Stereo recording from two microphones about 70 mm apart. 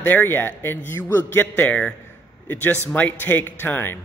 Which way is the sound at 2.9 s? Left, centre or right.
Left.